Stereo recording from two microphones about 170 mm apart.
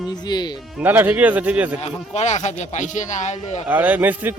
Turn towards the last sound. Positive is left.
turn(degrees=-10)  # may be behind; listen again after turning